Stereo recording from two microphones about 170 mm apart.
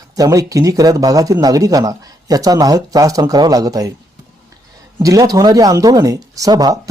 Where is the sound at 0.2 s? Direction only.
20° right (ahead or behind).